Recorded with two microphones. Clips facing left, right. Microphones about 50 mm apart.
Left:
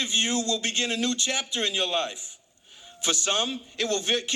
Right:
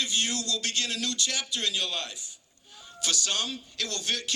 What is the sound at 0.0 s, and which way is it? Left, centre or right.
A man's voice, left.